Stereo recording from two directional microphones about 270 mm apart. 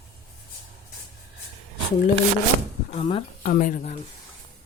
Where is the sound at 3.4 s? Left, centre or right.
Left.